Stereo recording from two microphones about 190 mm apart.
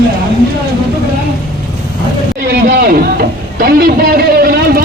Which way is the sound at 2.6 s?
50° right (ahead or behind).